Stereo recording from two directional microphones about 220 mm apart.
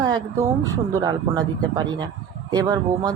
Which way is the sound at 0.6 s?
15° right (ahead or behind).